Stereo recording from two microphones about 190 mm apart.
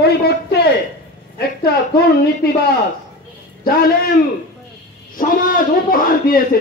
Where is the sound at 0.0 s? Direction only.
60° left (ahead or behind).